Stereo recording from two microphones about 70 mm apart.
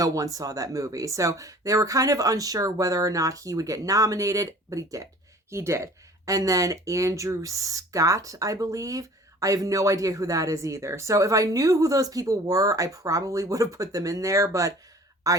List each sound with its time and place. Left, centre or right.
0.0 s speech: right
5.5 s speech: right